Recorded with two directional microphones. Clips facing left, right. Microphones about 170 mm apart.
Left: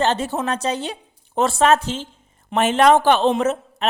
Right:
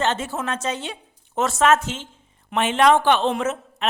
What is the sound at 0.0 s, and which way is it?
A woman's voice, 35° left (ahead or behind).